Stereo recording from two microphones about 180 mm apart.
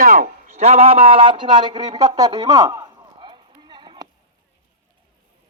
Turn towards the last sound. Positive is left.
turn(degrees=-25)  # may be behind; listen again after turning